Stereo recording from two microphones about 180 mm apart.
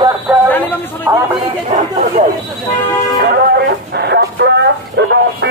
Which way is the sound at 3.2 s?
60° right (ahead or behind).